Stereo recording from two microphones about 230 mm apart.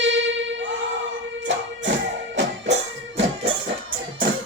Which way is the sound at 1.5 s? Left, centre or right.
Right.